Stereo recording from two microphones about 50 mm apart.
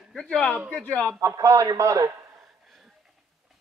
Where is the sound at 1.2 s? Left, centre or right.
Right.